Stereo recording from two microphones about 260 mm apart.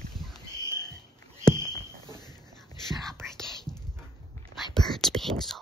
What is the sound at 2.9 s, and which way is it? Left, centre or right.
Whispering, centre.